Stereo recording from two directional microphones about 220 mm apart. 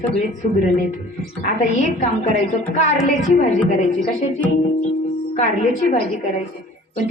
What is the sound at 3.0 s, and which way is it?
A woman's voice, 35° left (ahead or behind).